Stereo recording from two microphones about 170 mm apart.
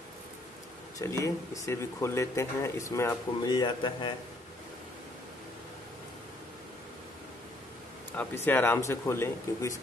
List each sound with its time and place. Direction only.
0.9 s speech: 20° left (ahead or behind)
8.2 s speech: 10° left (ahead or behind)